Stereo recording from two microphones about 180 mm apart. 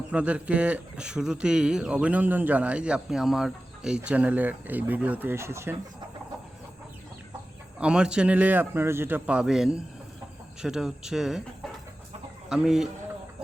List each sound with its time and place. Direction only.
0.1 s speech: 5° right (ahead or behind)
7.8 s speech: 5° right (ahead or behind)